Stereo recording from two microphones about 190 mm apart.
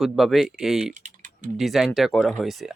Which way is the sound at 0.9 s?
40° right (ahead or behind).